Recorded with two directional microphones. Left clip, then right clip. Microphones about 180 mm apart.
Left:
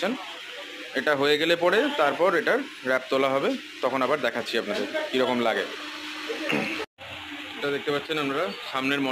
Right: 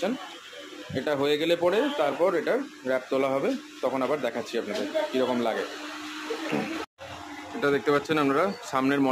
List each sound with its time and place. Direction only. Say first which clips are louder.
0.9 s speech: left 3 dB; centre (ahead or behind)
7.6 s speech: right 4 dB; 40° right (ahead or behind)